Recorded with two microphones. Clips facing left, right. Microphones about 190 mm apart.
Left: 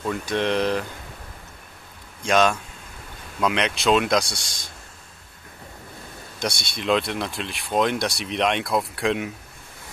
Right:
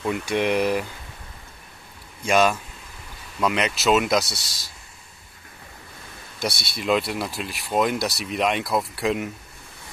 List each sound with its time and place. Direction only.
0.0 s speech: 10° right (ahead or behind)
2.2 s speech: 5° right (ahead or behind)
6.6 s speech: 5° right (ahead or behind)